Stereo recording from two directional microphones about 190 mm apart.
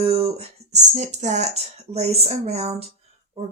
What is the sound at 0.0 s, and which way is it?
Speech, 30° right (ahead or behind).